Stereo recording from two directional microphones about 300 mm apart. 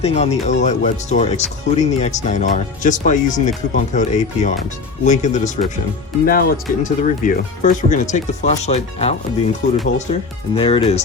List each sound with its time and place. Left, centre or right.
0.0 s speech: left